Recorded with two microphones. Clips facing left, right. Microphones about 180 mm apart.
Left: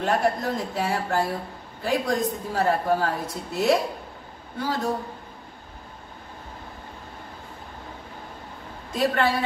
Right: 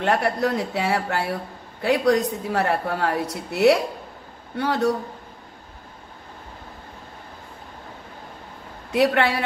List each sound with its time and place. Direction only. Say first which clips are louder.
0.0 s speech: right 2 dB; 70° right (ahead or behind)
8.9 s speech: right 3 dB; 70° right (ahead or behind)